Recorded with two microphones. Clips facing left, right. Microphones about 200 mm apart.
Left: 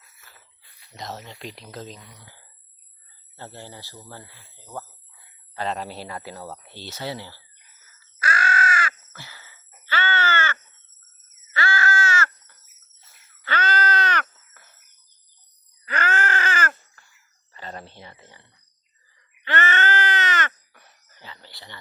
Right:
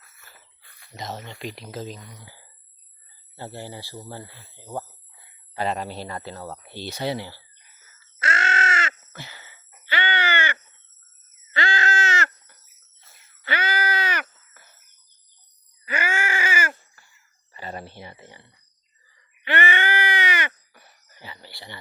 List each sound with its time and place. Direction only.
0.6 s a sound: 50° right (ahead or behind)
0.9 s speech: centre (ahead or behind)
3.3 s speech: 10° right (ahead or behind)
5.5 s speech: 5° right (ahead or behind)
6.7 s speech: 15° right (ahead or behind)
7.9 s caw: 25° right (ahead or behind)
11.5 s a sound: 20° right (ahead or behind)
13.4 s groan: 10° right (ahead or behind)
15.8 s a sound: 10° right (ahead or behind)